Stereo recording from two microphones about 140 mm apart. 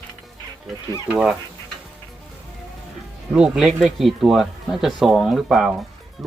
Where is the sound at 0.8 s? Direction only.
25° left (ahead or behind).